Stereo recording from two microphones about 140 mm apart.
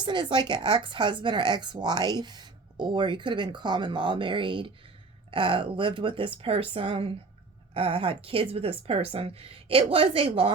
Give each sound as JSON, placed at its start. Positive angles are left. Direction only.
{"t": 0.0, "sound": "a woman's voice", "side_deg": -35}